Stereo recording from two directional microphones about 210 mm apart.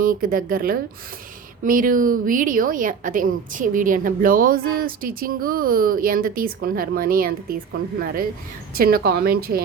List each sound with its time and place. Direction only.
0.0 s a woman's voice: 40° right (ahead or behind)